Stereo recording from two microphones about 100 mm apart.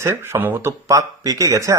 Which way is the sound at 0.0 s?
25° right (ahead or behind).